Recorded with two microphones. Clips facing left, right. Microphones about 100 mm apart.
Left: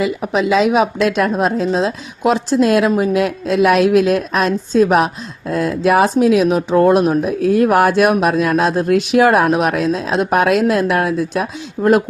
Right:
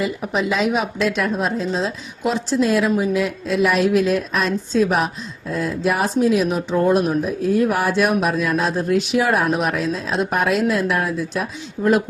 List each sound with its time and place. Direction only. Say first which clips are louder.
0.0 s speech: left 5 dB; 90° left
1.1 s a woman's voice: left 5 dB; 55° left (ahead or behind)